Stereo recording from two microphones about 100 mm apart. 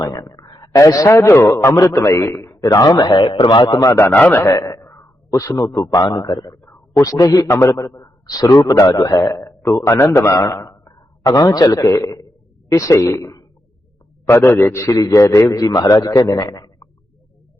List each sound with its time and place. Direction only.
0.0 s a woman's voice: 35° left (ahead or behind)
2.6 s a man's voice: 40° left (ahead or behind)
3.8 s a man's voice: 30° left (ahead or behind)
4.0 s a man's voice: 15° left (ahead or behind)
4.4 s a man's voice: 35° left (ahead or behind)
9.2 s a man's voice: 30° left (ahead or behind)